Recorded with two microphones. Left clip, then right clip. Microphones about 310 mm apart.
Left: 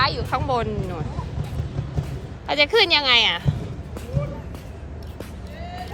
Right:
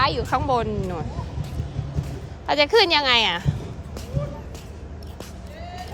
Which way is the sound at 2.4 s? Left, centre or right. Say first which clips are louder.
Even; centre.